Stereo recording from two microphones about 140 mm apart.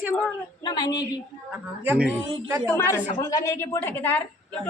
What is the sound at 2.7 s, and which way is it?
A woman's voice, 20° left (ahead or behind).